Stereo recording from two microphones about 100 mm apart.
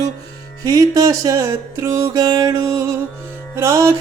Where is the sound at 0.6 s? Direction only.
40° right (ahead or behind).